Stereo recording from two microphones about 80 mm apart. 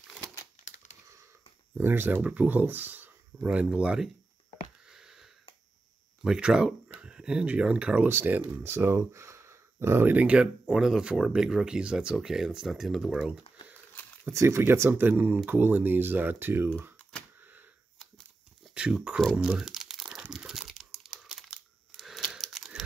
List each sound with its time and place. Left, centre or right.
1.8 s speech: right
4.9 s a sound: centre
6.2 s speech: centre
8.1 s speech: right
10.1 s speech: centre
14.2 s speech: right
18.8 s speech: centre
19.3 s crumpling: centre
21.9 s tearing: centre